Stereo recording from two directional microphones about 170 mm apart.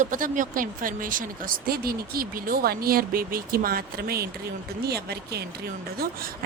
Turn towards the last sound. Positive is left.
turn(degrees=-60)  # may be behind; listen again after turning